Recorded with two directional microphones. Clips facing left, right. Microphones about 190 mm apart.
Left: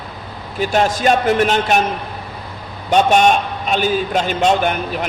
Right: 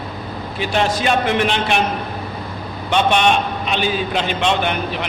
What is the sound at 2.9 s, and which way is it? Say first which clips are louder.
A man's voice: left 3 dB; 40° left (ahead or behind).